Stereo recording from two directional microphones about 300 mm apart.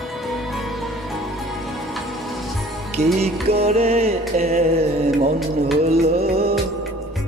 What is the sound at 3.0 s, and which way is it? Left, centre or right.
Music, right.